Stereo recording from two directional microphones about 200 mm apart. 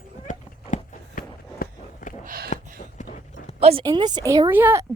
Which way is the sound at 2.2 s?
45° right (ahead or behind).